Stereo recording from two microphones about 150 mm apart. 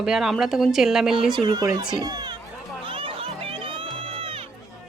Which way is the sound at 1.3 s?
30° right (ahead or behind).